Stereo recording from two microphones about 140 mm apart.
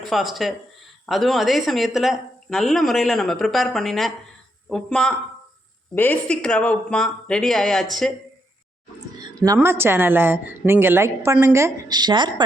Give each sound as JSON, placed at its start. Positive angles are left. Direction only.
{"t": 0.0, "sound": "a woman's voice", "side_deg": 0}
{"t": 9.3, "sound": "a sound", "side_deg": -25}
{"t": 9.6, "sound": "a woman's voice", "side_deg": -15}